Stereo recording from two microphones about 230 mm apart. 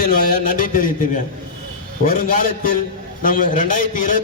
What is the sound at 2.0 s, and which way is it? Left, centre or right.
A man's voice, left.